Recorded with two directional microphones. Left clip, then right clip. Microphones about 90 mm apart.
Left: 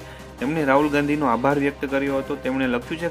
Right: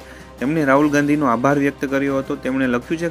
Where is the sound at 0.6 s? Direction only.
50° right (ahead or behind).